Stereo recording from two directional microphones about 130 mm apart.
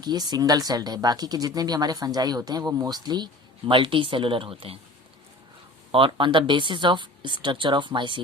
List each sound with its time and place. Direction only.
0.0 s speech: 30° right (ahead or behind)
5.9 s speech: 40° right (ahead or behind)